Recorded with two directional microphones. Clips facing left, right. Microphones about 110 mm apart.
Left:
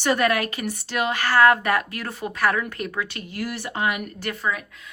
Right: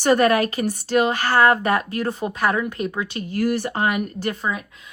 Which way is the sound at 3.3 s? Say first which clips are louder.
Right 7 dB; 45° right (ahead or behind).